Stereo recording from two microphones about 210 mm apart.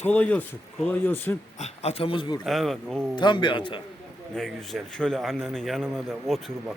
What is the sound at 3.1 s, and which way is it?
Speech, 20° left (ahead or behind).